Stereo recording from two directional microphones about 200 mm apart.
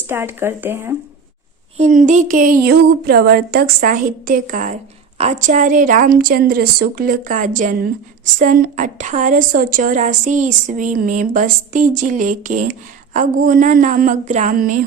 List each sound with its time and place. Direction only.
0.1 s speech: 10° right (ahead or behind)
1.8 s speech: 40° right (ahead or behind)